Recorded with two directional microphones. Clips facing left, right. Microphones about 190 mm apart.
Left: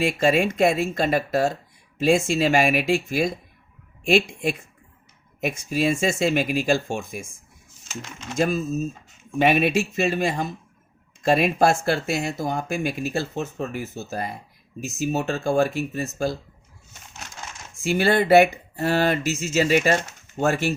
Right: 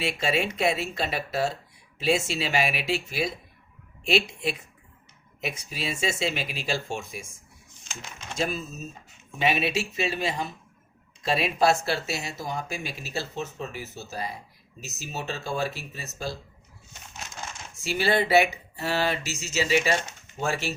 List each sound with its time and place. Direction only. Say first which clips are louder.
0.0 s speech: left 7 dB; 50° left (ahead or behind)
9.4 s speech: left 6 dB; 55° left (ahead or behind)
17.7 s speech: left 5 dB; 50° left (ahead or behind)